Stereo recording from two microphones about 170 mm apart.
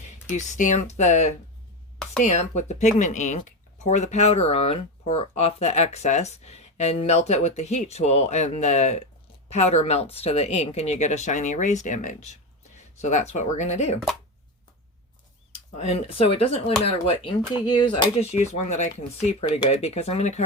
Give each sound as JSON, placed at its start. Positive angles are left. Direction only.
{"t": 0.1, "sound": "speech", "side_deg": 45}
{"t": 15.5, "sound": "speech", "side_deg": 40}
{"t": 18.3, "sound": "speech", "side_deg": 40}